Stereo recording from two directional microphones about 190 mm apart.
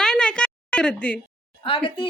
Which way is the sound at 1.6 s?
30° left (ahead or behind).